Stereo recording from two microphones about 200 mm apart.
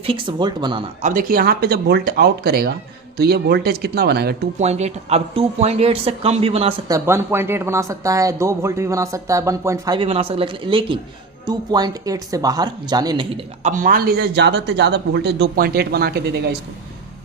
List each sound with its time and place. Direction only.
0.0 s speech: 25° right (ahead or behind)
1.0 s speech: 40° right (ahead or behind)
4.5 s speech: 35° right (ahead or behind)
6.8 s speech: 15° right (ahead or behind); by 16.6 s 55° right (ahead or behind)